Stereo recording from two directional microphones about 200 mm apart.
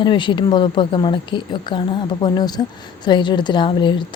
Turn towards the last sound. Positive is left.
turn(degrees=25)  # may be behind; listen again after turning